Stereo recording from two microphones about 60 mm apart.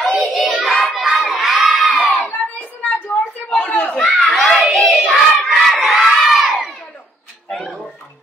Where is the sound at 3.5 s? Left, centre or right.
Left.